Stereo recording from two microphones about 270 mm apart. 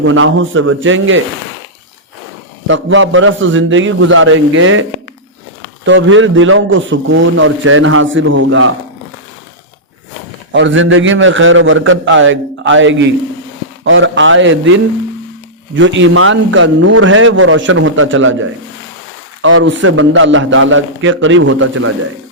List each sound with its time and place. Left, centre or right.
0.0 s a man's voice: right
2.6 s a man's voice: right
10.5 s a man's voice: right